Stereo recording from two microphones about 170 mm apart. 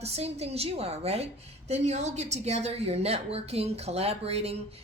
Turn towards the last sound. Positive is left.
turn(degrees=-35)  # may be behind; listen again after turning